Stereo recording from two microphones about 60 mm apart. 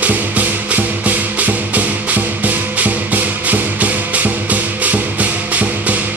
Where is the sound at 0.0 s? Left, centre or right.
Right.